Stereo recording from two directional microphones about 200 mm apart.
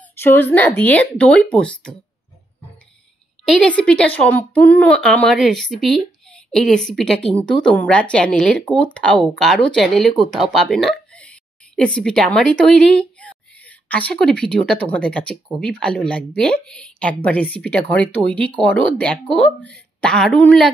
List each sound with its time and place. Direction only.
0.2 s speech: 10° left (ahead or behind)
3.4 s a woman's voice: 5° left (ahead or behind)